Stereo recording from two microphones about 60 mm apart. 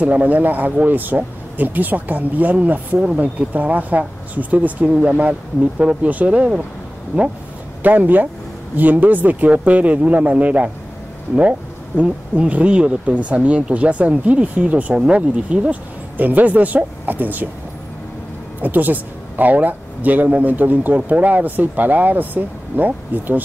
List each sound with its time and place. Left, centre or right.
0.0 s speech: right
12.0 s speech: right
18.6 s speech: right